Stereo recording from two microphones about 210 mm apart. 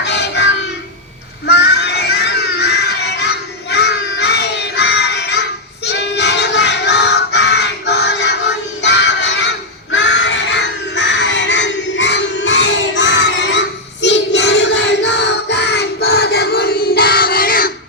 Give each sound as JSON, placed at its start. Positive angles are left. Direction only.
{"t": 0.0, "sound": "music", "side_deg": 55}
{"t": 1.5, "sound": "crowd", "side_deg": 50}
{"t": 9.9, "sound": "a sound", "side_deg": 60}
{"t": 14.0, "sound": "child singing", "side_deg": 55}